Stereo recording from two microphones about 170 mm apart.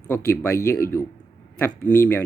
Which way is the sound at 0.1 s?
15° left (ahead or behind).